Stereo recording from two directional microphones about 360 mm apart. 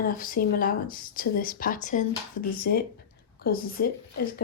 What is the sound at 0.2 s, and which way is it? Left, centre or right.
Speech, left.